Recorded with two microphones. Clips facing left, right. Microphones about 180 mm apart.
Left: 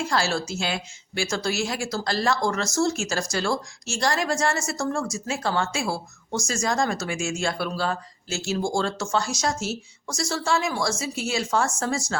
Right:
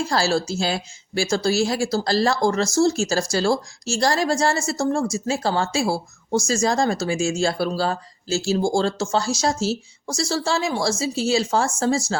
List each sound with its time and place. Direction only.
0.0 s a woman's voice: 35° right (ahead or behind)